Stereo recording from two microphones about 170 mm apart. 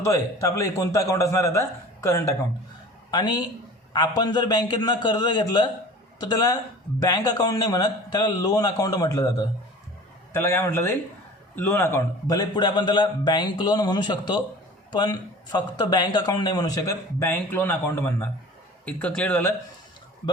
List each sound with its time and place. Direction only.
0.0 s a man's voice: 20° left (ahead or behind)